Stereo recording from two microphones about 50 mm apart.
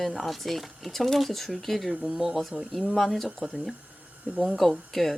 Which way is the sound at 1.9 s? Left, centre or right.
Right.